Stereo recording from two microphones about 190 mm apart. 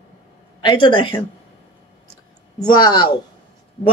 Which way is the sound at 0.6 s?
25° left (ahead or behind).